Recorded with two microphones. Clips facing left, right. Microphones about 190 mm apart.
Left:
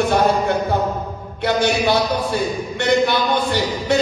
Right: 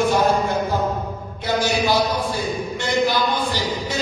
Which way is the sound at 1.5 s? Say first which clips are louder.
Left 2 dB; 65° left (ahead or behind).